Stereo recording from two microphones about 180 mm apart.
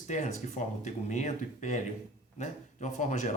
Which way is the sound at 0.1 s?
40° left (ahead or behind).